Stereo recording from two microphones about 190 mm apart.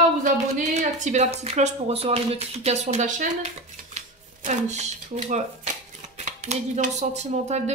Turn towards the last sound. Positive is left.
turn(degrees=-35)  # may be behind; listen again after turning